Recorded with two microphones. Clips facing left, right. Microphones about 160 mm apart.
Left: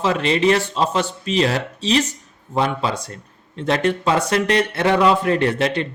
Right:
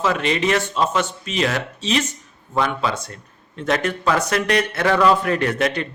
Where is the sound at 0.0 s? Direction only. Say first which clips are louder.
Left 3 dB; 30° left (ahead or behind).